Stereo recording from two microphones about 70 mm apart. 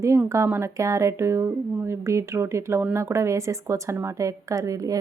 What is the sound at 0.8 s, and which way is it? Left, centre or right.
A woman's voice, right.